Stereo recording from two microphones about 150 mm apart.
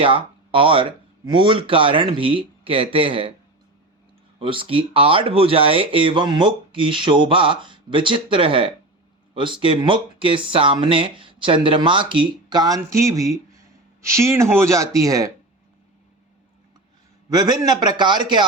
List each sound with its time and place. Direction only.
0.0 s speech: 35° right (ahead or behind)
4.4 s speech: 35° right (ahead or behind)
17.2 s speech: 25° right (ahead or behind)